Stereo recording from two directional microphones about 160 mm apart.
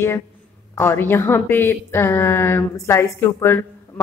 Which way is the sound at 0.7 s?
15° left (ahead or behind).